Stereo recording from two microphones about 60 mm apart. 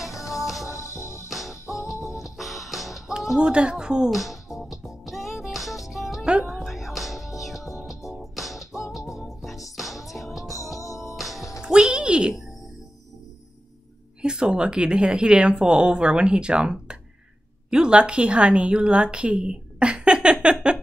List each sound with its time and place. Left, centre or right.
0.1 s music: left
1.9 s music: centre
11.6 s music: centre
14.2 s a woman's voice: centre